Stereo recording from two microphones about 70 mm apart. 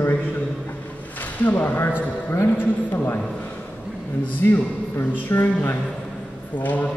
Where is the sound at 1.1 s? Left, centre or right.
Left.